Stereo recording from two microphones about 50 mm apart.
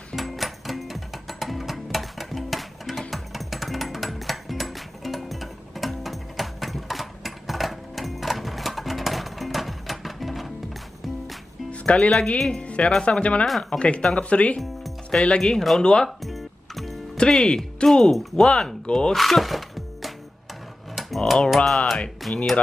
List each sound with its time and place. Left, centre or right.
0.1 s music: centre
11.8 s music: left
12.1 s speech: centre
12.6 s speech: left
16.3 s music: centre
17.3 s speech: centre
19.1 s speech: centre
20.9 s a sound: centre
21.6 s speech: centre